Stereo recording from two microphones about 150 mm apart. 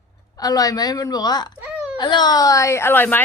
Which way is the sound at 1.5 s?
10° right (ahead or behind).